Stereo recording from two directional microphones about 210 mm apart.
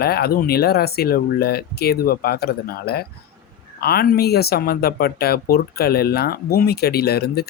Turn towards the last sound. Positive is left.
turn(degrees=50)  # may be behind; listen again after turning